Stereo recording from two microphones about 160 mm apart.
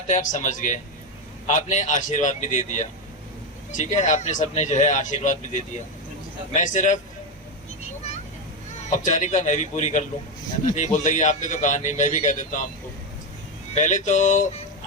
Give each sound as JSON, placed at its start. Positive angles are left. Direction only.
{"t": 0.1, "sound": "a man's voice", "side_deg": 50}
{"t": 8.8, "sound": "a man's voice", "side_deg": 50}
{"t": 13.7, "sound": "a man's voice", "side_deg": 50}